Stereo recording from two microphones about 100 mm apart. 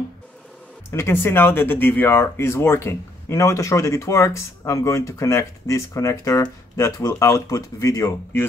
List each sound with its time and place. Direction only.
0.9 s speech: 25° left (ahead or behind)